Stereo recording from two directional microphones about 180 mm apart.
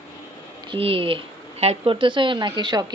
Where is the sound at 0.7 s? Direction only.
30° right (ahead or behind).